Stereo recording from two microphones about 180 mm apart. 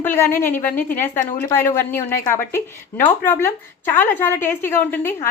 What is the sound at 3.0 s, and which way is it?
A woman's voice, 15° left (ahead or behind).